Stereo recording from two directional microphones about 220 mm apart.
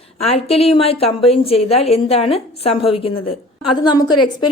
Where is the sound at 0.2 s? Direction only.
30° left (ahead or behind).